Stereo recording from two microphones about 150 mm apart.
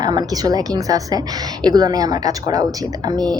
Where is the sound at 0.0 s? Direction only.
25° right (ahead or behind).